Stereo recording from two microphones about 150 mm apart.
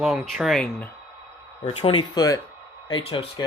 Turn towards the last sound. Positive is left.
turn(degrees=35)  # may be behind; listen again after turning